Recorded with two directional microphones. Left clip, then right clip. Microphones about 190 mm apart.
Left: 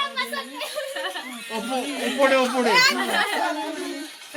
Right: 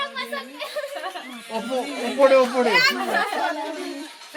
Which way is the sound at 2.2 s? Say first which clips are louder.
Right 3 dB; 65° right (ahead or behind).